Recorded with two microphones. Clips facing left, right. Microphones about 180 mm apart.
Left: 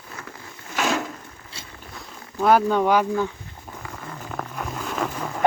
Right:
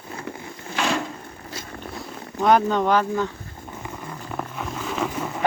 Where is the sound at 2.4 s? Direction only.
5° left (ahead or behind).